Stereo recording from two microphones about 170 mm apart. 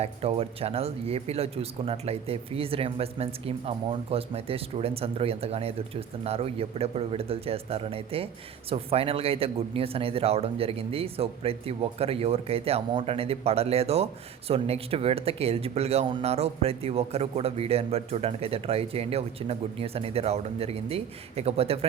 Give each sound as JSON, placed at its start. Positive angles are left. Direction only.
{"t": 0.0, "sound": "speech", "side_deg": -35}